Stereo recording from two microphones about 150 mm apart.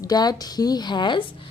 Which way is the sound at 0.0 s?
25° left (ahead or behind).